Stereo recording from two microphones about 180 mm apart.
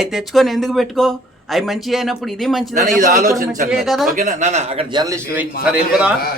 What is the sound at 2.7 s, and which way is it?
A man's voice, 45° right (ahead or behind).